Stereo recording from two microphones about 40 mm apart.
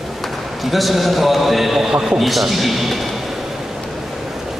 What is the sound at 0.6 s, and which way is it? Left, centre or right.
A man's voice, centre.